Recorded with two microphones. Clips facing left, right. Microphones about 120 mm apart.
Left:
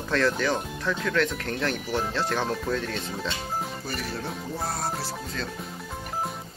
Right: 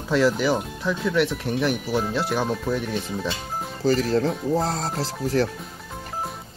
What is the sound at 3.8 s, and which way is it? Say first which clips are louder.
Speech: right 12 dB; 90° right.